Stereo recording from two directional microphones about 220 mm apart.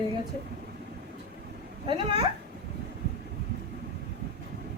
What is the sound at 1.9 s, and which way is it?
Speech, 25° right (ahead or behind).